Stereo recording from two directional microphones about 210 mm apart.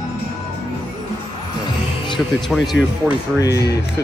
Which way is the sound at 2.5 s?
Centre (ahead or behind).